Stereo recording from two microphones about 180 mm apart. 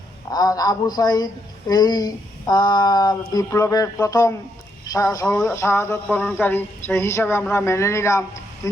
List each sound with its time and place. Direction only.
0.3 s speech: 20° left (ahead or behind)